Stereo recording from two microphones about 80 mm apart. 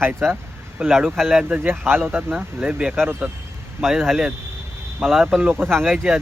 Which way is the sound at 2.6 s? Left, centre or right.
Centre.